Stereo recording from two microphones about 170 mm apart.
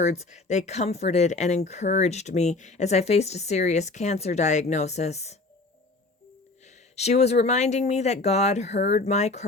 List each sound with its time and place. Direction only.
0.0 s speech: 45° left (ahead or behind)
6.9 s speech: 40° left (ahead or behind)